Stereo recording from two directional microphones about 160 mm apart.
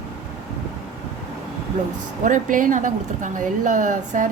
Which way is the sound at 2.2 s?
55° right (ahead or behind).